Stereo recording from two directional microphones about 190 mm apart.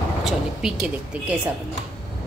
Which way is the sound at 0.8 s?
5° right (ahead or behind).